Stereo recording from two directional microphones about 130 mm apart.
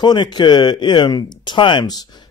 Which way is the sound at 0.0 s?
35° left (ahead or behind).